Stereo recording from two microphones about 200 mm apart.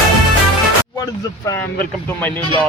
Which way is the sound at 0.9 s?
15° left (ahead or behind).